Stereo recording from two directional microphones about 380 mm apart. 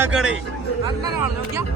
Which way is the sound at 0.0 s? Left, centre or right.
Centre.